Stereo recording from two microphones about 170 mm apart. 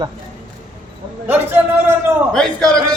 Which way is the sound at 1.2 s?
10° right (ahead or behind).